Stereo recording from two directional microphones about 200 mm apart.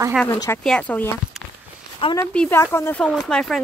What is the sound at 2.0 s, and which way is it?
Speech, 25° left (ahead or behind).